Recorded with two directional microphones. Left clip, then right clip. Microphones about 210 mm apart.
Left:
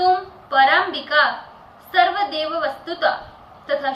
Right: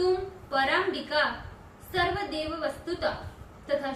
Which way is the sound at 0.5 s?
25° right (ahead or behind).